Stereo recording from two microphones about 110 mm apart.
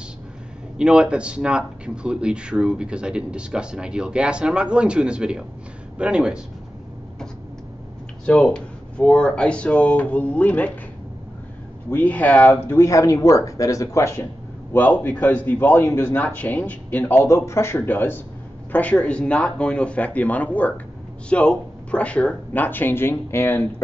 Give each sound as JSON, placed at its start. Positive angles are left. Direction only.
{"t": 0.7, "sound": "speech", "side_deg": -10}
{"t": 8.3, "sound": "speech", "side_deg": 10}
{"t": 11.9, "sound": "speech", "side_deg": 15}
{"t": 12.6, "sound": "speech", "side_deg": 25}
{"t": 14.7, "sound": "speech", "side_deg": 15}